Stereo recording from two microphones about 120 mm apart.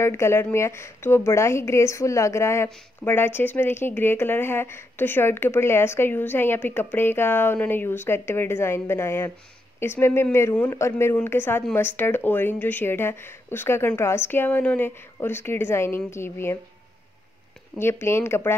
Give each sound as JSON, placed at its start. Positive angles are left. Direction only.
{"t": 0.0, "sound": "a woman's voice", "side_deg": 20}
{"t": 17.7, "sound": "a woman's voice", "side_deg": 20}